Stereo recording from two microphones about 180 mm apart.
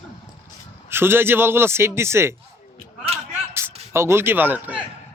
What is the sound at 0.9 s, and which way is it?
A man's voice, 15° right (ahead or behind).